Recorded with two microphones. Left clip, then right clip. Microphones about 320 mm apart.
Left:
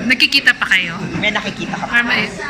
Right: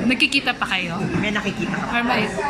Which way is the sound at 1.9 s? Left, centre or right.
Centre.